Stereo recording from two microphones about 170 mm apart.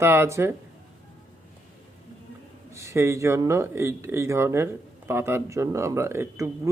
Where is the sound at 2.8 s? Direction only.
15° right (ahead or behind).